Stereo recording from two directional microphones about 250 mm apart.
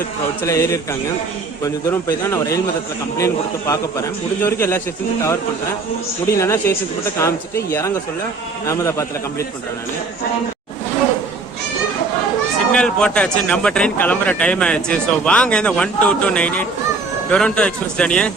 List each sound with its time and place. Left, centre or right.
0.4 s speech: centre
6.3 s speech: centre
12.7 s a man's voice: centre